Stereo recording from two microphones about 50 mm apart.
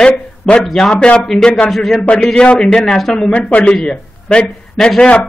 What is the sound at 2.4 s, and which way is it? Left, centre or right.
Speech, centre.